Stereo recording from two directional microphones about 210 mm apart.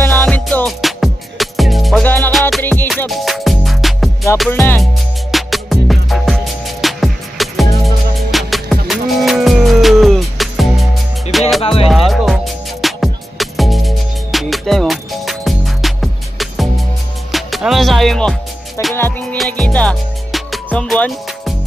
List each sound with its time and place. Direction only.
0.0 s music: 10° left (ahead or behind)
4.5 s music: 10° left (ahead or behind)
5.3 s music: centre (ahead or behind)
11.6 s music: 25° left (ahead or behind)
11.9 s music: centre (ahead or behind)